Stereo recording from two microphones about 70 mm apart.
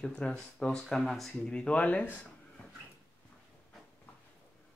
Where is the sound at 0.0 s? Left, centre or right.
Centre.